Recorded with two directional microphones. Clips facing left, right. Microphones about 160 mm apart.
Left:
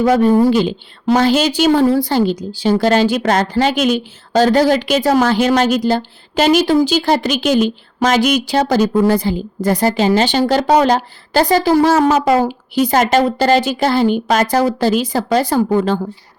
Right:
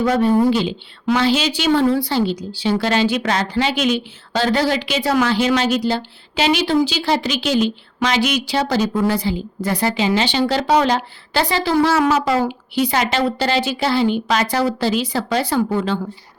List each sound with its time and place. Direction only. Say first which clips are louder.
0.0 s a woman's voice: left 4 dB; 45° left (ahead or behind)